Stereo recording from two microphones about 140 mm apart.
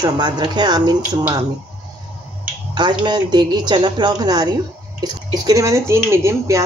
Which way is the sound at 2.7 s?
30° right (ahead or behind).